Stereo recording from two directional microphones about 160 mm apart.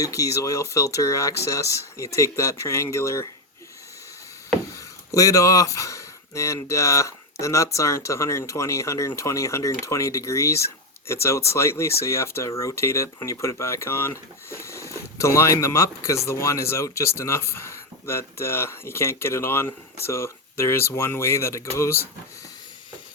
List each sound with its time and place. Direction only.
0.0 s speech: 20° left (ahead or behind)
5.1 s speech: 20° left (ahead or behind)